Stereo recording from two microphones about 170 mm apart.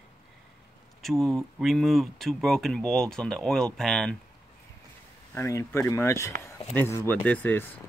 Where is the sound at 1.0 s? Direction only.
Centre (ahead or behind).